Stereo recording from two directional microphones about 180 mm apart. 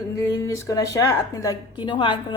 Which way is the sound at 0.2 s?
20° left (ahead or behind).